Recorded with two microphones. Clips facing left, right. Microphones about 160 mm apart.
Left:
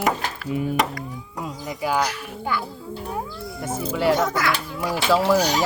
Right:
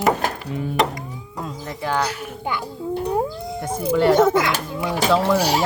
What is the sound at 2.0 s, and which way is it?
Speech, 20° right (ahead or behind).